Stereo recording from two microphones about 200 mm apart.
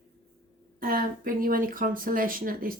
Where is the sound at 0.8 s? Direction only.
45° right (ahead or behind).